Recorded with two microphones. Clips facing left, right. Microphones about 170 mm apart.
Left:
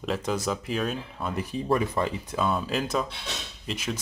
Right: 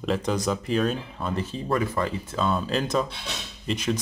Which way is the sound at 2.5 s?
5° left (ahead or behind).